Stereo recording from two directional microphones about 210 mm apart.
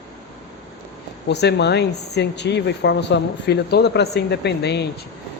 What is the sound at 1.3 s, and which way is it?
Speech, 55° left (ahead or behind).